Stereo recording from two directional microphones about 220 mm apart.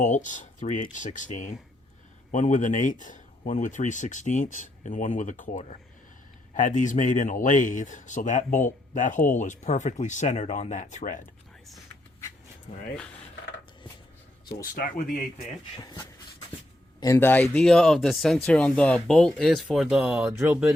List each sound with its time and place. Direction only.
0.0 s speech: 35° left (ahead or behind)
12.7 s speech: 35° left (ahead or behind)
14.6 s speech: 40° left (ahead or behind)
17.0 s speech: 10° left (ahead or behind); by 20.7 s 5° right (ahead or behind)